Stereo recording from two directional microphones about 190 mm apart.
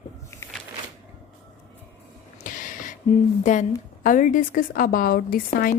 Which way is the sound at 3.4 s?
40° left (ahead or behind).